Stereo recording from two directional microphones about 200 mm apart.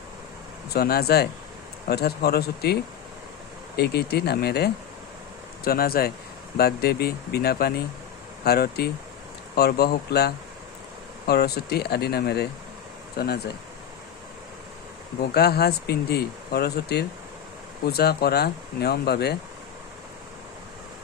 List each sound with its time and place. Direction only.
0.7 s speech: 50° left (ahead or behind)
3.8 s speech: 55° left (ahead or behind)
15.3 s speech: 50° left (ahead or behind)